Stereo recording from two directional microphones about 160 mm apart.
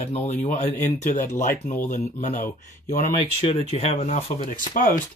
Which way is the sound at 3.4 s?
40° left (ahead or behind).